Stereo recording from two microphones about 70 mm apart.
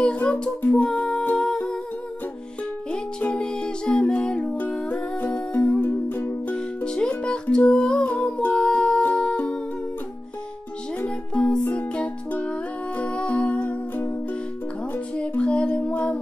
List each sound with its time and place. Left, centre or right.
0.0 s humming: centre
0.8 s music: centre
2.9 s music: centre
4.7 s humming: centre
5.9 s music: left
6.5 s music: centre
11.0 s music: left
15.3 s music: centre